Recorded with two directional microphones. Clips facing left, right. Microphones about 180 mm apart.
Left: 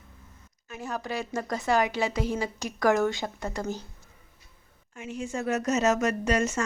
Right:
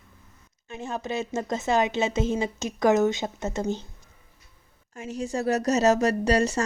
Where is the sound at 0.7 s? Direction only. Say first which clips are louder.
Right 2 dB; 25° right (ahead or behind).